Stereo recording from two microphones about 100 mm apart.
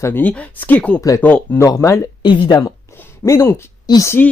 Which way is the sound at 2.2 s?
50° left (ahead or behind).